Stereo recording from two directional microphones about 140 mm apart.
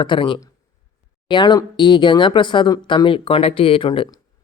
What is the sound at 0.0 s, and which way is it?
Speech, 35° left (ahead or behind).